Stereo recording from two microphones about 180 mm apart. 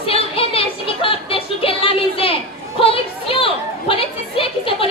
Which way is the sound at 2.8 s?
30° left (ahead or behind).